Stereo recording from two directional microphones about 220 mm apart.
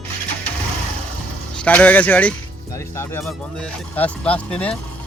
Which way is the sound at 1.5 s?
5° left (ahead or behind).